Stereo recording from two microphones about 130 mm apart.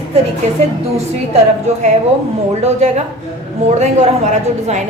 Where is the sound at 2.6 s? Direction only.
55° right (ahead or behind).